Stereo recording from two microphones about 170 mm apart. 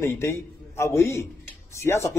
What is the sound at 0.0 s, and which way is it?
A man's voice, 15° left (ahead or behind).